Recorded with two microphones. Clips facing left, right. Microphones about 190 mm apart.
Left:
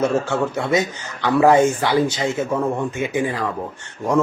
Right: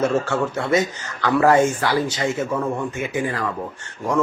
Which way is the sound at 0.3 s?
15° left (ahead or behind).